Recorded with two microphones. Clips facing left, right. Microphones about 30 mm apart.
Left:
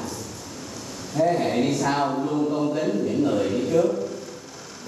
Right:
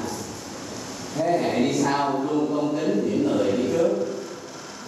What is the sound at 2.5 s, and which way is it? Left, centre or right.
Speech, centre.